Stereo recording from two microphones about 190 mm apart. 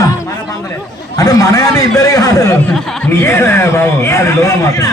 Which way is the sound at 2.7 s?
5° left (ahead or behind).